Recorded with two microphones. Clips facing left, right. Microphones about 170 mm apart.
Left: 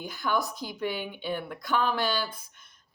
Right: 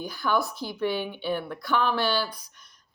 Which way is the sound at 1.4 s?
45° left (ahead or behind).